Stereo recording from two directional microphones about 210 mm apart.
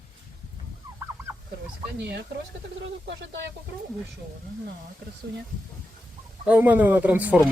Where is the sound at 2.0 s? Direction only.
55° right (ahead or behind).